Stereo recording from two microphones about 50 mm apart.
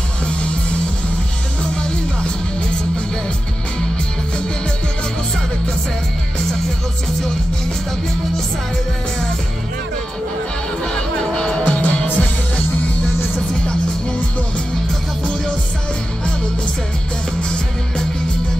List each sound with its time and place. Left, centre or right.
1.6 s music: centre
10.8 s music: centre
17.4 s music: centre